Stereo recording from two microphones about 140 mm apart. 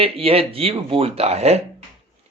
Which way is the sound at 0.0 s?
45° right (ahead or behind).